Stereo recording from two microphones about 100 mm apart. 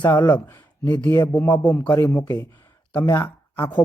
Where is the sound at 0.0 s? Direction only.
45° left (ahead or behind).